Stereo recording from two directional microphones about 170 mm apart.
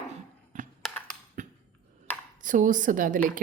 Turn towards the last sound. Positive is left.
turn(degrees=-50)  # may be behind; listen again after turning